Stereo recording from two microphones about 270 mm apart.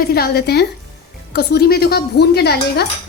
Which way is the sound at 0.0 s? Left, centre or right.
Left.